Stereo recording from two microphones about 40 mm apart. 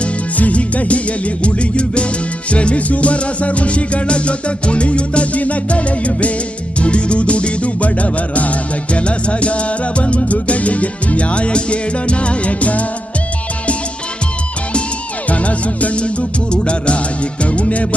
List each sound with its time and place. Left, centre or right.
0.3 s music: left
15.3 s music: left